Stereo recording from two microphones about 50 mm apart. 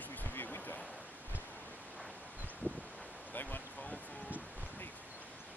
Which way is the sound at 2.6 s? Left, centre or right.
Right.